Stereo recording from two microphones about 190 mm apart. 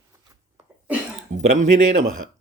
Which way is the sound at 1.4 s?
40° right (ahead or behind).